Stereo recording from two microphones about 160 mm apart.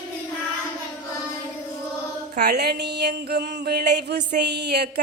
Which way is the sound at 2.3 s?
85° right.